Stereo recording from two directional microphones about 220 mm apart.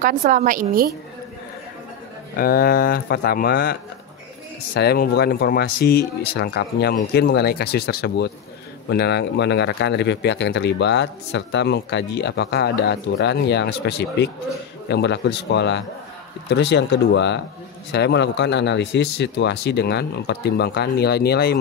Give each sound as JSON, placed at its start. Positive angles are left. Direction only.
{"t": 0.0, "sound": "a woman's voice", "side_deg": -40}
{"t": 2.3, "sound": "speech", "side_deg": 40}
{"t": 4.7, "sound": "speech", "side_deg": 45}